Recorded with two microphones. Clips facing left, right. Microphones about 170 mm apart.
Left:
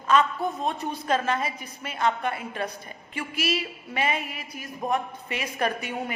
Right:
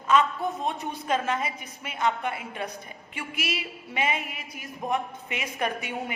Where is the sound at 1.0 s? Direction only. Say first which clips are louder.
Left 1 dB; 15° right (ahead or behind).